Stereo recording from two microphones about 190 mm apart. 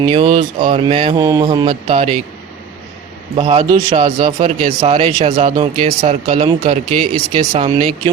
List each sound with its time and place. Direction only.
0.0 s speech: 25° right (ahead or behind)
3.3 s speech: 25° right (ahead or behind)
4.8 s speech: 25° right (ahead or behind)